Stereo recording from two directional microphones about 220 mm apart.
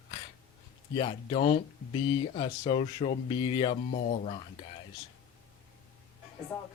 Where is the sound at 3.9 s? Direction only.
40° left (ahead or behind).